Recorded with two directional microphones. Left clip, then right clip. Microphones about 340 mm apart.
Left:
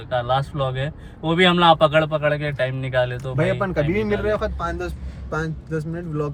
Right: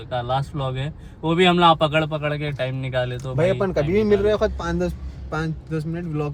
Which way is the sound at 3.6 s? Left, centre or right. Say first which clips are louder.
Right 2 dB; right.